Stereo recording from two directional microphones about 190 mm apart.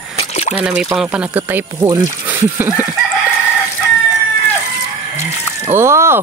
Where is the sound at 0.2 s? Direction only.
35° left (ahead or behind).